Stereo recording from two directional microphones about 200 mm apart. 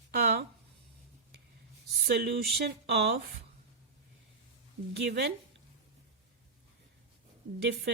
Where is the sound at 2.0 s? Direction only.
50° right (ahead or behind).